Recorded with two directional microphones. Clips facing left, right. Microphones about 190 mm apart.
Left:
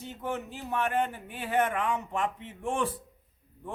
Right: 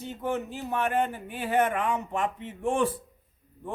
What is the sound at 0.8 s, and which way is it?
Speech, 5° right (ahead or behind).